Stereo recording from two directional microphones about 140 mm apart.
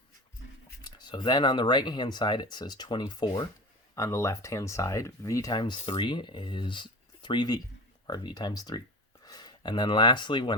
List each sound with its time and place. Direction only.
0.8 s speech: 30° left (ahead or behind)